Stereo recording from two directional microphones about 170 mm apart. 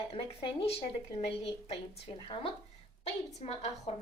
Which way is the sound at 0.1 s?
35° left (ahead or behind).